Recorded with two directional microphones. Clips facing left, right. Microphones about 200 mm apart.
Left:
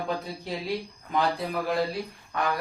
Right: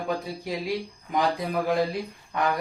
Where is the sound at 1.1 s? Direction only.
15° right (ahead or behind).